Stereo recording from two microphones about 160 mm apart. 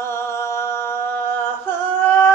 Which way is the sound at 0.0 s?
15° left (ahead or behind).